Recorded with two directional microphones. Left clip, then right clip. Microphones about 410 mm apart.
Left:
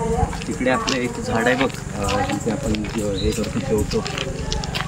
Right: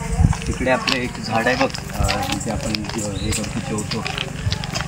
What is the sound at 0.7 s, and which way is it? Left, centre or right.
Speech, centre.